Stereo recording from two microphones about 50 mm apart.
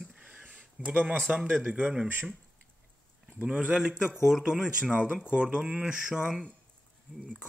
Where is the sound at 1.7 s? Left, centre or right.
Right.